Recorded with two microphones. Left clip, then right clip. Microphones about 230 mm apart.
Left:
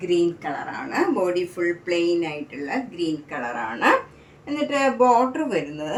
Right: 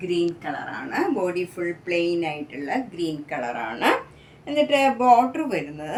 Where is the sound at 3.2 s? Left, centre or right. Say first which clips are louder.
Even; right.